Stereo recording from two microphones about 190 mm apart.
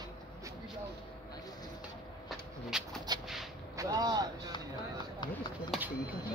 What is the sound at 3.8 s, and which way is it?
Vehicle, 20° right (ahead or behind).